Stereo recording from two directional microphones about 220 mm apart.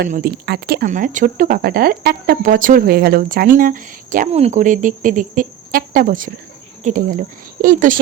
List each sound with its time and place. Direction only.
0.1 s speech: 40° right (ahead or behind)
0.9 s speech: 35° right (ahead or behind)